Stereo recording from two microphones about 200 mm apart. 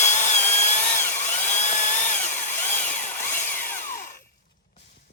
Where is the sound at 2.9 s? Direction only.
40° left (ahead or behind).